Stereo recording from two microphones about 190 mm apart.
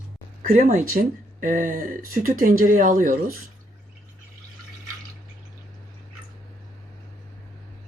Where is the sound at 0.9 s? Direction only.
60° right (ahead or behind).